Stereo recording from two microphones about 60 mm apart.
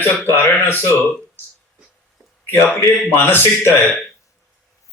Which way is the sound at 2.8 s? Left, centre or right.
Left.